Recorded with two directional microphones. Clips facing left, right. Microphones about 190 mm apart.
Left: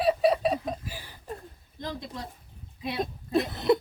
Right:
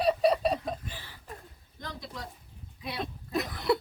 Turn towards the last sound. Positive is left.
turn(degrees=20)  # may be behind; listen again after turning